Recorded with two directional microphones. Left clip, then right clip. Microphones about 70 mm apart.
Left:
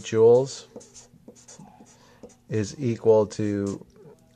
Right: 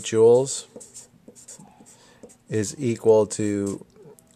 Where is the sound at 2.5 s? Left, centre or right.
Right.